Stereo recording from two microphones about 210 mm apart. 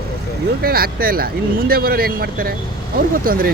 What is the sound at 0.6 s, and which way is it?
Speech, 45° right (ahead or behind).